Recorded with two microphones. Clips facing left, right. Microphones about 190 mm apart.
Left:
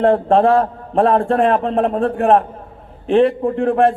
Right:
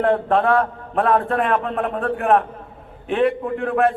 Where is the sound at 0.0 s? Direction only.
30° left (ahead or behind).